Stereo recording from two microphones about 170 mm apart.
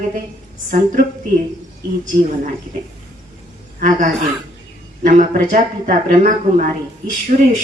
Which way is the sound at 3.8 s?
50° right (ahead or behind).